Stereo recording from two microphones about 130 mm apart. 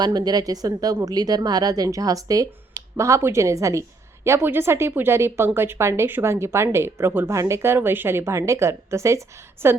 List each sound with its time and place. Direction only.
0.0 s speech: 30° right (ahead or behind)